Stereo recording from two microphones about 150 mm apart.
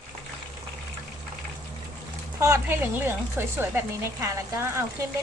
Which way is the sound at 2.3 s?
20° right (ahead or behind).